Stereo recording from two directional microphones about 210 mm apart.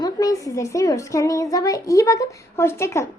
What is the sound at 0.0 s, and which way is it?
A woman's voice, 15° left (ahead or behind).